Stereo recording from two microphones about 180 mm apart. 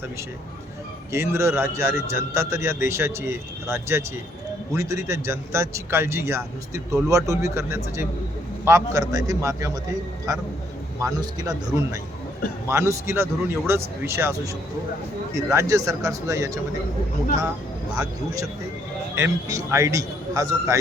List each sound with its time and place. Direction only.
1.1 s a man's voice: 15° right (ahead or behind)
11.0 s a man's voice: 20° right (ahead or behind)
19.1 s a man's voice: 15° right (ahead or behind)